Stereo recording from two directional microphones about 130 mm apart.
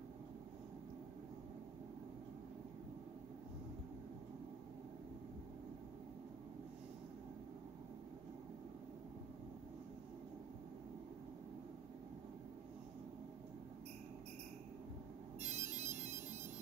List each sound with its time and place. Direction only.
15.4 s ringtone: 65° right (ahead or behind)